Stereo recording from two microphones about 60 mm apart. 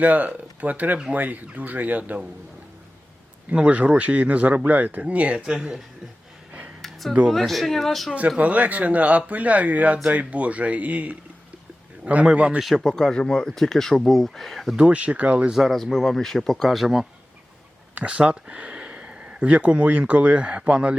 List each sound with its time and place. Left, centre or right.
0.0 s speech: right
3.5 s speech: right
7.3 s speech: centre
8.4 s speech: right
12.5 s speech: centre
14.8 s speech: centre
15.5 s speech: centre
17.9 s speech: centre